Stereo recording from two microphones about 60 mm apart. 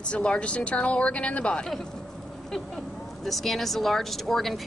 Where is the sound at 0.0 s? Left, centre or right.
Centre.